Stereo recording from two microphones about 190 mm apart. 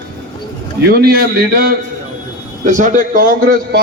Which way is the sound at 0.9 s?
50° right (ahead or behind).